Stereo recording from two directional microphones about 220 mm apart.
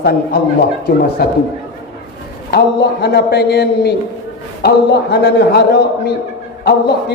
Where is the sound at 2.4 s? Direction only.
50° left (ahead or behind).